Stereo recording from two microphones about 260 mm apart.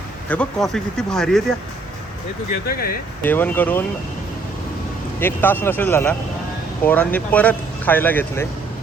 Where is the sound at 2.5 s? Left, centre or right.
Left.